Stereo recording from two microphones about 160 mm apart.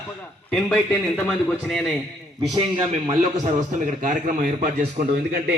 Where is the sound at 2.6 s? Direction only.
30° right (ahead or behind).